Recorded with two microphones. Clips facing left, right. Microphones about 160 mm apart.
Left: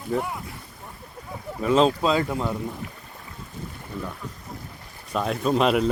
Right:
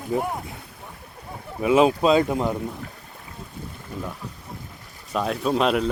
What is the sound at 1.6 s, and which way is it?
Speech, 10° right (ahead or behind).